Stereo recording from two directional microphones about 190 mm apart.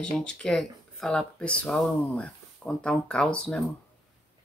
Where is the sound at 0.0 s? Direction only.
5° left (ahead or behind).